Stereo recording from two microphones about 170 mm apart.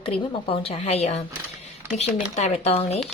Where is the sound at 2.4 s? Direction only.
40° left (ahead or behind).